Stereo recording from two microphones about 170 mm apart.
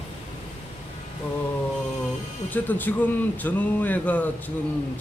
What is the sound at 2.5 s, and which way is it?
Speech, 10° left (ahead or behind).